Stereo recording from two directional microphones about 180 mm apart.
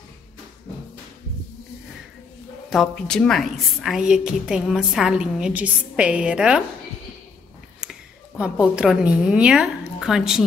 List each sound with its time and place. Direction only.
2.7 s a woman's voice: centre (ahead or behind)
7.8 s a sound: 5° right (ahead or behind)
8.4 s a woman's voice: 5° right (ahead or behind)